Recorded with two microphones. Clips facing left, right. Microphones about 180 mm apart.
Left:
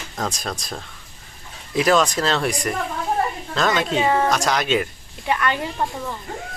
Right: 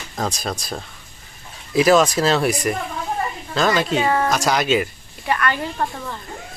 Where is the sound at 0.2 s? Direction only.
Centre (ahead or behind).